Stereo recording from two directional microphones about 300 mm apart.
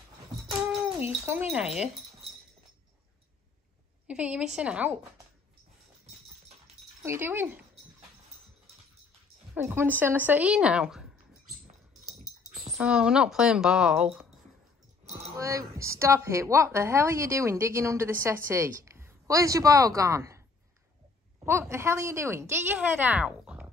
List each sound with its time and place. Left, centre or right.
1.2 s speech: centre
4.1 s speech: centre
7.0 s a woman's voice: centre
9.5 s speech: centre
12.7 s speech: centre
15.3 s a woman's voice: centre
21.5 s a woman's voice: centre